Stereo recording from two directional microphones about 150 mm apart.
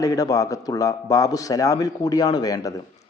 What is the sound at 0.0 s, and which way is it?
A man's voice, 25° left (ahead or behind).